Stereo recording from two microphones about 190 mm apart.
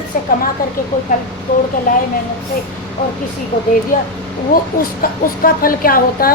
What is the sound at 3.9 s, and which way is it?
A woman's voice, 40° left (ahead or behind).